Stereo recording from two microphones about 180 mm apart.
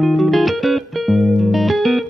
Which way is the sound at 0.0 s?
Centre (ahead or behind).